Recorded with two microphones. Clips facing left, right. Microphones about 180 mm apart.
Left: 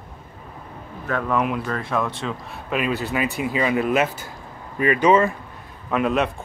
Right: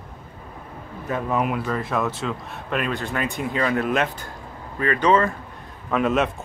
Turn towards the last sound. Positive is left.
turn(degrees=0)  # may be behind; listen again after turning